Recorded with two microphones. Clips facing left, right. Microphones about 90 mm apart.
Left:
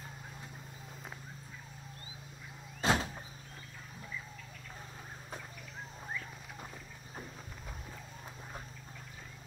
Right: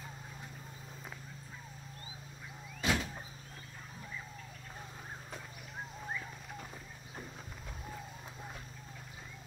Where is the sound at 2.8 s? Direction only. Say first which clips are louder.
Left 3 dB; 35° left (ahead or behind).